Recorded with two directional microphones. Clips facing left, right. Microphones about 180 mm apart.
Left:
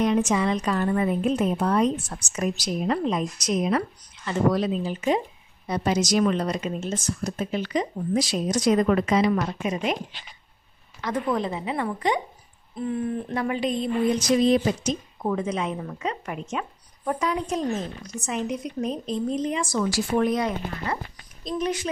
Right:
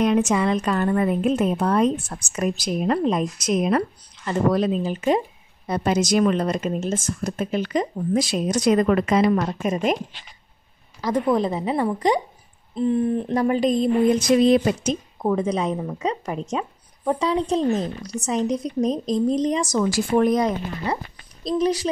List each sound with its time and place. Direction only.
0.0 s speech: 65° right (ahead or behind); by 9.9 s 45° right (ahead or behind)
11.0 s a woman's voice: 35° right (ahead or behind)
14.3 s speech: 65° right (ahead or behind)
15.2 s a woman's voice: 35° right (ahead or behind)